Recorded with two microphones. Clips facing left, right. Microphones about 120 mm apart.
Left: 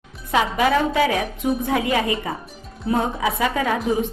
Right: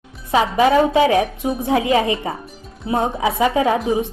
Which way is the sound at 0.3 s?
25° right (ahead or behind).